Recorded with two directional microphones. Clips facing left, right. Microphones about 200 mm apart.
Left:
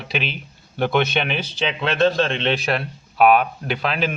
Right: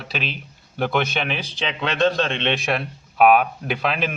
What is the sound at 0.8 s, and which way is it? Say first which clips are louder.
A man's voice: left 3 dB; 5° right (ahead or behind).